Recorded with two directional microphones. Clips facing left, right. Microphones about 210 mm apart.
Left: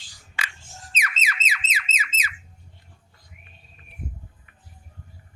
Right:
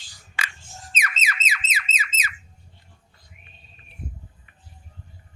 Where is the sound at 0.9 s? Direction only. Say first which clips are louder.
Right 1 dB; 45° right (ahead or behind).